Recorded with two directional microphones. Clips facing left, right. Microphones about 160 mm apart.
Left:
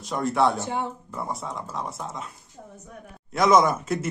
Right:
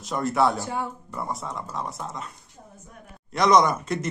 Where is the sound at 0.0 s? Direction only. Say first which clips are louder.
Even; centre (ahead or behind).